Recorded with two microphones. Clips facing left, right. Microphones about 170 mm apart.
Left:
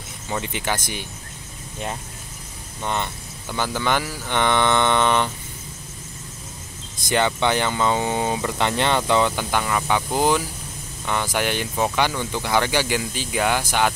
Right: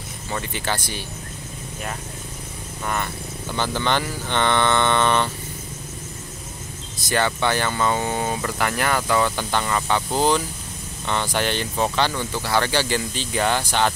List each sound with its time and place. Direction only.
0.3 s speech: 15° left (ahead or behind)
2.8 s speech: 20° left (ahead or behind)
3.5 s speech: 10° left (ahead or behind)
7.1 s speech: 20° left (ahead or behind)